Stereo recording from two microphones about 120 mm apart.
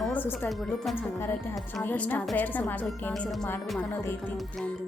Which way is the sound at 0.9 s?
15° left (ahead or behind).